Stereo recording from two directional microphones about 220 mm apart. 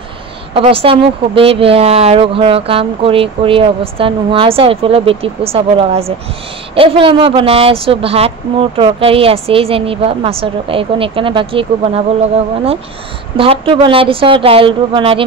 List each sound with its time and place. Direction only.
0.6 s speech: 25° right (ahead or behind)
13.4 s speech: 25° right (ahead or behind)